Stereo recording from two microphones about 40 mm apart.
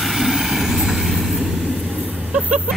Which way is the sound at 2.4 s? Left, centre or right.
Right.